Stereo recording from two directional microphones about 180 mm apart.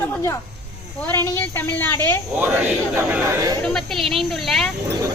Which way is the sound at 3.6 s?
Centre (ahead or behind).